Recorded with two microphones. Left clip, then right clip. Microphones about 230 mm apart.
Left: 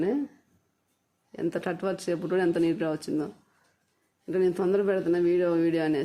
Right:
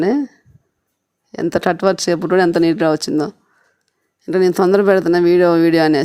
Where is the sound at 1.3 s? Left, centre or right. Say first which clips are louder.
Right 13 dB; right.